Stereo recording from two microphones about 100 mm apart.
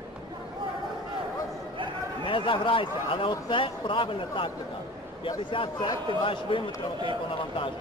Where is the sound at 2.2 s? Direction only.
60° left (ahead or behind).